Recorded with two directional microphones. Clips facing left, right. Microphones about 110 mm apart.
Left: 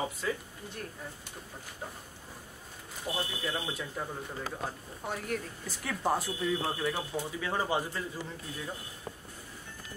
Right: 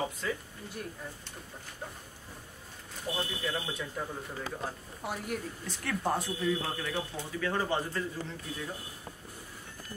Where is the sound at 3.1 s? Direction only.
20° left (ahead or behind).